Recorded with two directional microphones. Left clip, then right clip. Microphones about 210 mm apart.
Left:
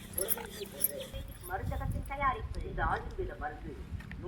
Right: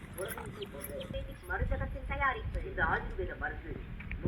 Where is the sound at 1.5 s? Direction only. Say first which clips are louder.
Right 2 dB; 30° left (ahead or behind).